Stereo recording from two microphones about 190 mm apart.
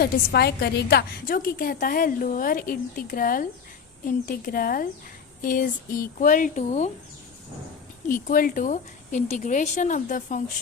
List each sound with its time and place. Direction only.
0.0 s a woman's voice: 55° left (ahead or behind); by 6.9 s 40° left (ahead or behind)
8.0 s a woman's voice: 45° left (ahead or behind)